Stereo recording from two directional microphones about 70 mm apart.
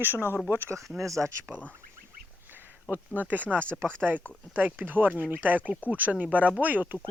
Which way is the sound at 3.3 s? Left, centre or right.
Right.